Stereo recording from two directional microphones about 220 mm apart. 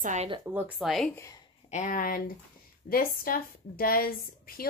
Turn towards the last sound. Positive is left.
turn(degrees=40)  # may be behind; listen again after turning